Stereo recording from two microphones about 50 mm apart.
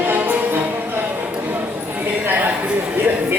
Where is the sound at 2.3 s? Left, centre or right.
Right.